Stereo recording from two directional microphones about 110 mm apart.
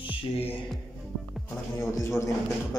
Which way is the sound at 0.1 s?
60° left (ahead or behind).